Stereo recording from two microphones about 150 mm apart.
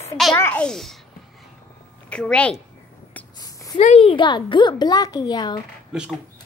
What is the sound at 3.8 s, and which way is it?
A woman's voice, 45° left (ahead or behind).